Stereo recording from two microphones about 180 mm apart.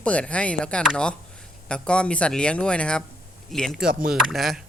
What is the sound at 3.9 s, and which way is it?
Speech, 55° right (ahead or behind).